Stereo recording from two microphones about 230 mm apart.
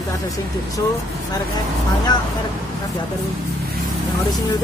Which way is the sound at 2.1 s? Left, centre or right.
Centre.